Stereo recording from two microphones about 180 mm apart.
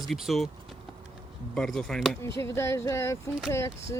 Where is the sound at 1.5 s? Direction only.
5° left (ahead or behind).